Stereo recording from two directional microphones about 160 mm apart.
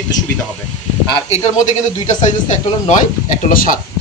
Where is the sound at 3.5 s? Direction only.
60° left (ahead or behind).